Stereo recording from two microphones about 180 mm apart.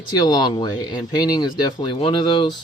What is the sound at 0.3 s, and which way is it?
Speech, 25° left (ahead or behind).